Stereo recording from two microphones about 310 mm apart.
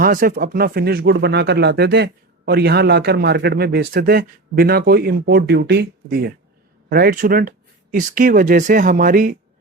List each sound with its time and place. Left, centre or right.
0.0 s speech: right